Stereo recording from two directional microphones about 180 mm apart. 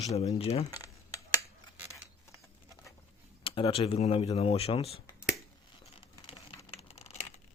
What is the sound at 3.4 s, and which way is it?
Speech, 30° left (ahead or behind).